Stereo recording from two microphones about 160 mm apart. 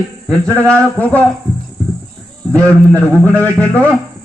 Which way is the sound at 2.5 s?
5° left (ahead or behind).